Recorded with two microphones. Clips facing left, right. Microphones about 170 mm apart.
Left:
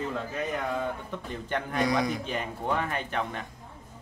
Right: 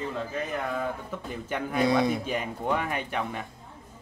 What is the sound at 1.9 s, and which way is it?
Speech, 30° right (ahead or behind).